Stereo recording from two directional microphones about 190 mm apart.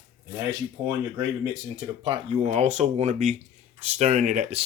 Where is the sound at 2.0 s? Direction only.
30° right (ahead or behind).